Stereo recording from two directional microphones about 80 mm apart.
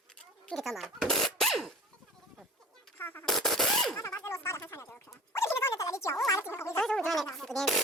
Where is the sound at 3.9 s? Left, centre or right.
Left.